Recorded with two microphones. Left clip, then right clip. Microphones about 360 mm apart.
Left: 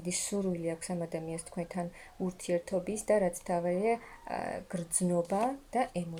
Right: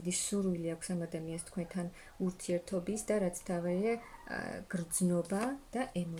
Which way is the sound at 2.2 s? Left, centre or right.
Centre.